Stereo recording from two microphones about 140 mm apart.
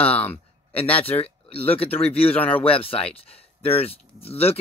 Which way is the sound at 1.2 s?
45° left (ahead or behind).